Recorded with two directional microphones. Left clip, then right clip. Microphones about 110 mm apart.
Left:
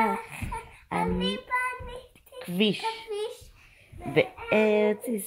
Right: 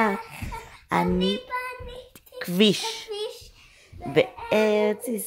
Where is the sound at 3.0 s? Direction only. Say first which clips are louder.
Right 1 dB; 30° right (ahead or behind).